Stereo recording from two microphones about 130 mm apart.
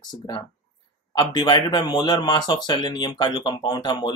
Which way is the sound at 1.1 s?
35° left (ahead or behind).